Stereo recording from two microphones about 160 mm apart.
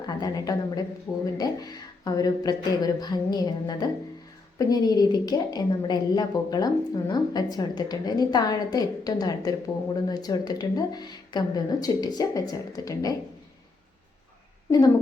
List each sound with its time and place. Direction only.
0.0 s a woman's voice: 25° left (ahead or behind)